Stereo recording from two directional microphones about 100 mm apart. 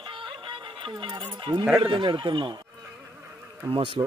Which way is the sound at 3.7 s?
60° right (ahead or behind).